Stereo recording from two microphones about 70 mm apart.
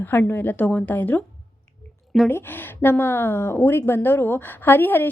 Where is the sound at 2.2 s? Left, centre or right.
Left.